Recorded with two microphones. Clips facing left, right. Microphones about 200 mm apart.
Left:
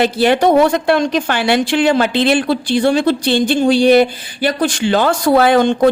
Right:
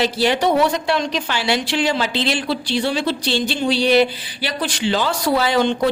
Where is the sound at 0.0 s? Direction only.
55° left (ahead or behind).